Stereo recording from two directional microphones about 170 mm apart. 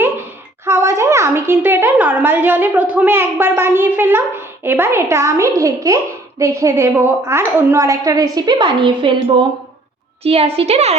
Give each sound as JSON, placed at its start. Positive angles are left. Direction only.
{"t": 0.0, "sound": "a woman's voice", "side_deg": -15}